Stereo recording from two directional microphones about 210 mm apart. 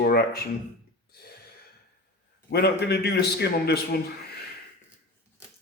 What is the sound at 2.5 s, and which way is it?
Speech, 50° left (ahead or behind).